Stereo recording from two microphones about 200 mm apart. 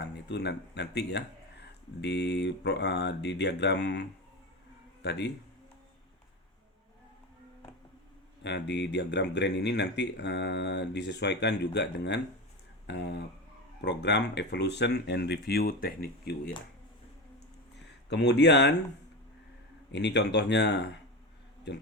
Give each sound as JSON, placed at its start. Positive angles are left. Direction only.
{"t": 0.0, "sound": "speech", "side_deg": 60}
{"t": 5.0, "sound": "speech", "side_deg": 60}
{"t": 8.4, "sound": "speech", "side_deg": 60}
{"t": 18.1, "sound": "speech", "side_deg": 60}
{"t": 19.9, "sound": "speech", "side_deg": 60}